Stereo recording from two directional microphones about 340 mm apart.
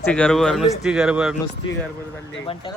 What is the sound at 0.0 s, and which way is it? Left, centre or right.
Speech, centre.